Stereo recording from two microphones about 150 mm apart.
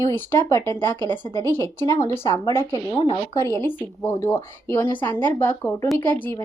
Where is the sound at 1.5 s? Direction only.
15° left (ahead or behind).